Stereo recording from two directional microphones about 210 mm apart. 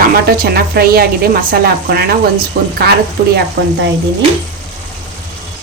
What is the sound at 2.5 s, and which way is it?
Speech, 55° right (ahead or behind).